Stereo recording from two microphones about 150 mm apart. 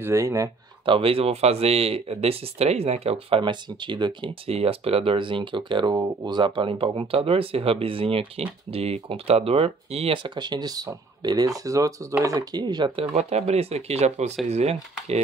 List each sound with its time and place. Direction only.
0.0 s speech: 20° right (ahead or behind)
0.8 s speech: 40° right (ahead or behind)
13.1 s speech: 45° right (ahead or behind)